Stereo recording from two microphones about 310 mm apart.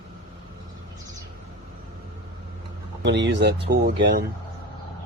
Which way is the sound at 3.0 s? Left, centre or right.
Right.